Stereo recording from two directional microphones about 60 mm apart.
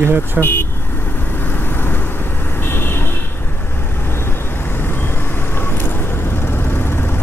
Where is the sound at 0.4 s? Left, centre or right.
Left.